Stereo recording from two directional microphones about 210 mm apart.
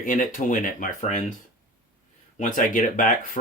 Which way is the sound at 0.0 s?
40° left (ahead or behind).